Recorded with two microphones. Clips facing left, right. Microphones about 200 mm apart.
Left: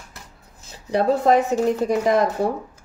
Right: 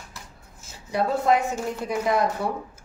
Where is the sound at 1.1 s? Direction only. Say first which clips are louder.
Left 5 dB; 40° left (ahead or behind).